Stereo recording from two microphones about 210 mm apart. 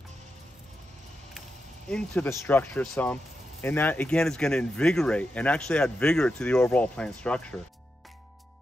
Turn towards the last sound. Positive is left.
turn(degrees=5)  # may be behind; listen again after turning